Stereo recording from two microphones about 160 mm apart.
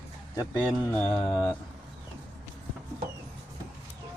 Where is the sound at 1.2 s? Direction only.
25° left (ahead or behind).